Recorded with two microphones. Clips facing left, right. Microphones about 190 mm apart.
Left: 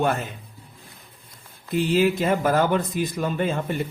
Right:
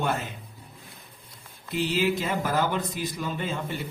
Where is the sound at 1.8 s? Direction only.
50° left (ahead or behind).